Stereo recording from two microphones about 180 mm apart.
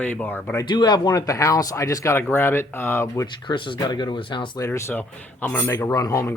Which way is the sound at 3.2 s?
25° left (ahead or behind).